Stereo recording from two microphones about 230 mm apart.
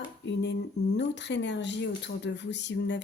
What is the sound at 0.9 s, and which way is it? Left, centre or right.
A woman's voice, left.